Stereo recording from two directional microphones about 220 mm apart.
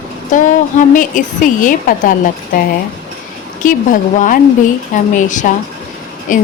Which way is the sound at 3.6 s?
35° left (ahead or behind).